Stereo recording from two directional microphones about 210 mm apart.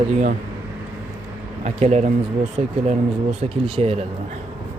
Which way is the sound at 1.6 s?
35° right (ahead or behind).